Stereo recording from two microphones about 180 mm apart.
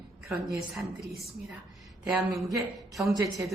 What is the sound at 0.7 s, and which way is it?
A woman's voice, centre (ahead or behind).